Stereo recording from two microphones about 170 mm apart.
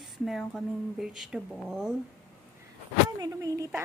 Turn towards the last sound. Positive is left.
turn(degrees=-20)  # may be behind; listen again after turning